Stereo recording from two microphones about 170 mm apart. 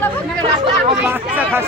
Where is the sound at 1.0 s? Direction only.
10° right (ahead or behind).